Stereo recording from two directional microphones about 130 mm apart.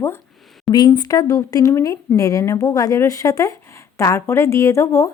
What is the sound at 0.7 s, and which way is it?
A woman's voice, 35° left (ahead or behind).